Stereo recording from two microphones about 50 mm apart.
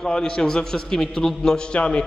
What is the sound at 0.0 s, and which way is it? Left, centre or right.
A man's voice, centre.